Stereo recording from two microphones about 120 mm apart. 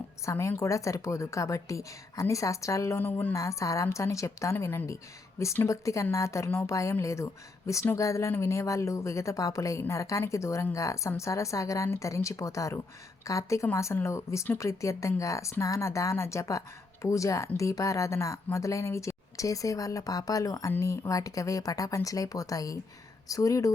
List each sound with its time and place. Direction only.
0.3 s speech: 25° left (ahead or behind)
3.0 s a woman's voice: 15° left (ahead or behind)
3.3 s speech: 25° left (ahead or behind)